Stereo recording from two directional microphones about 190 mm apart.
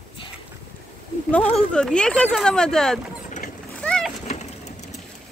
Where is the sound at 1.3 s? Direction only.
5° left (ahead or behind).